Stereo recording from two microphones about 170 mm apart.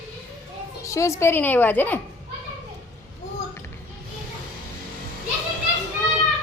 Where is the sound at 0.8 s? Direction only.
15° left (ahead or behind).